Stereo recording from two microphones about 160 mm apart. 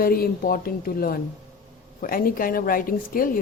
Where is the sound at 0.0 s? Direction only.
65° left (ahead or behind).